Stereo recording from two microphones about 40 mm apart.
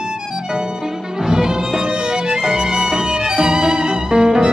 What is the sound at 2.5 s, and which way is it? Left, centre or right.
Music, centre.